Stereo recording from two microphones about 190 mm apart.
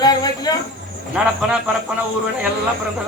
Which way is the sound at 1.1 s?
5° right (ahead or behind).